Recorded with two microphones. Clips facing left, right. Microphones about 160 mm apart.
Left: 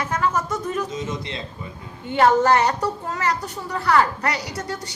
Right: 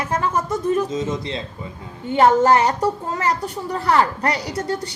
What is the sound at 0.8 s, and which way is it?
A woman's voice, 30° right (ahead or behind).